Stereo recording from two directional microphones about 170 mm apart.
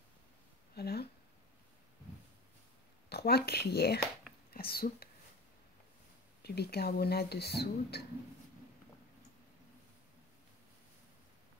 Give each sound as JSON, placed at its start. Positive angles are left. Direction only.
{"t": 0.7, "sound": "speech", "side_deg": 70}
{"t": 3.1, "sound": "speech", "side_deg": 70}
{"t": 6.4, "sound": "speech", "side_deg": 70}